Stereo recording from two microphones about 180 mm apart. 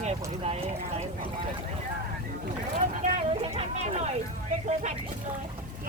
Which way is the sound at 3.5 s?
35° right (ahead or behind).